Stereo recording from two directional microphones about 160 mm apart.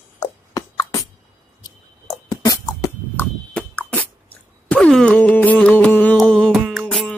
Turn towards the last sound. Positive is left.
turn(degrees=0)  # may be behind; listen again after turning